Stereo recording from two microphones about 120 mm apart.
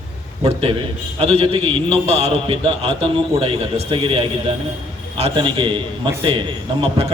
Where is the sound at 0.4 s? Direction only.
50° right (ahead or behind).